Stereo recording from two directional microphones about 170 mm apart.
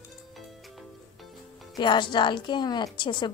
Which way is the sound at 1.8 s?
30° left (ahead or behind).